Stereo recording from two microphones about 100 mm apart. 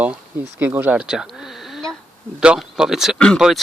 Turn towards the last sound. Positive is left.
turn(degrees=-5)  # may be behind; listen again after turning